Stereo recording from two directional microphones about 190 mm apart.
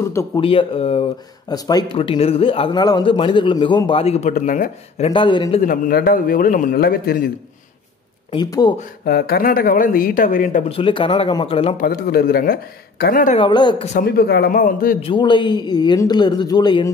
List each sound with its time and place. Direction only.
0.0 s speech: 15° left (ahead or behind)
0.4 s a man's voice: 30° left (ahead or behind)
1.5 s a man's voice: 20° left (ahead or behind)
5.6 s a man's voice: 50° left (ahead or behind)
8.3 s a man's voice: 20° left (ahead or behind)
9.0 s a man's voice: 55° left (ahead or behind)
10.7 s a man's voice: 25° left (ahead or behind)
11.8 s a man's voice: 55° left (ahead or behind)
13.4 s a man's voice: 25° left (ahead or behind)
13.9 s a man's voice: 55° left (ahead or behind)
15.0 s a man's voice: 25° left (ahead or behind)